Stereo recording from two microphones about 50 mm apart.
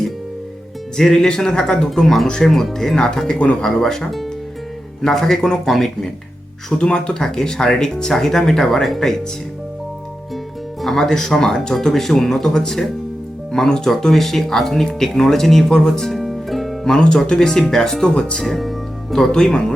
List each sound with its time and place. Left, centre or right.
0.9 s speech: centre
3.4 s speech: left
3.8 s speech: centre
5.0 s speech: centre
6.7 s speech: centre
10.8 s speech: centre
16.8 s speech: centre
18.3 s speech: centre